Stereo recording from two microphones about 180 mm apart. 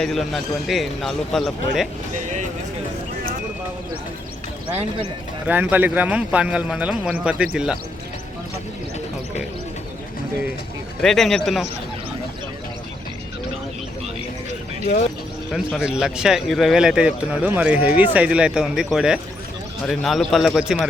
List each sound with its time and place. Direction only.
0.0 s speech: centre (ahead or behind)
4.7 s speech: 35° right (ahead or behind)
5.5 s a man's voice: 10° right (ahead or behind)
11.0 s speech: centre (ahead or behind)
15.5 s speech: 5° right (ahead or behind)